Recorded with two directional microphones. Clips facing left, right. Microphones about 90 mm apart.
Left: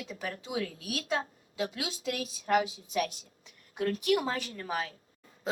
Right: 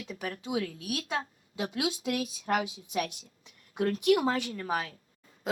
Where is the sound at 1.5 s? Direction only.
20° right (ahead or behind).